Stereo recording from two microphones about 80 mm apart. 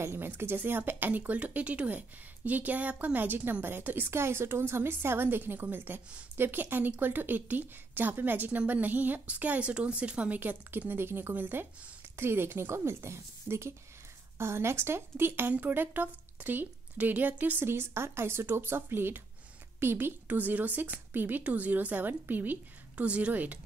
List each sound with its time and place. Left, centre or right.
0.0 s a woman's voice: right